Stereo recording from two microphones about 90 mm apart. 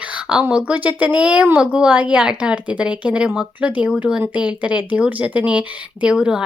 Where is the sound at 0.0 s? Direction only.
15° right (ahead or behind).